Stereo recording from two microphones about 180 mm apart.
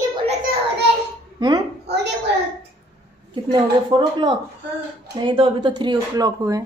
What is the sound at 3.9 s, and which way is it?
Speech, 30° right (ahead or behind).